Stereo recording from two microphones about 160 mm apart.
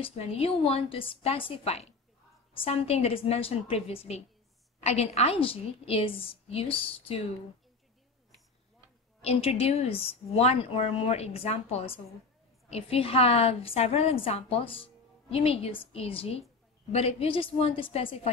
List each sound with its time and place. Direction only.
0.0 s a woman's voice: 35° left (ahead or behind)
9.2 s a woman's voice: 40° left (ahead or behind)